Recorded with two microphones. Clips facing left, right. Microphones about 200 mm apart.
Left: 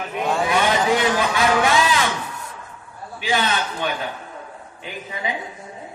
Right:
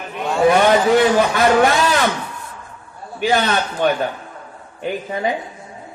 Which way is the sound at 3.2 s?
50° right (ahead or behind).